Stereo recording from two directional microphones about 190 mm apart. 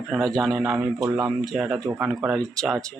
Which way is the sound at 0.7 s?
15° right (ahead or behind).